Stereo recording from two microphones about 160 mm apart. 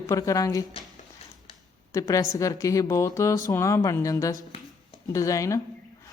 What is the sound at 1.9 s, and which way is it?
A woman's voice, 20° left (ahead or behind).